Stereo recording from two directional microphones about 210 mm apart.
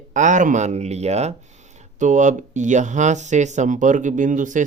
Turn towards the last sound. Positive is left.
turn(degrees=-35)  # may be behind; listen again after turning